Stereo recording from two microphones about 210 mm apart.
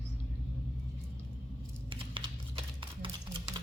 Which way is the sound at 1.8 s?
25° right (ahead or behind).